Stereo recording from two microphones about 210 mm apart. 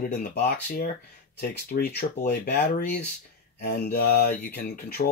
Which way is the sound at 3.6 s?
55° left (ahead or behind).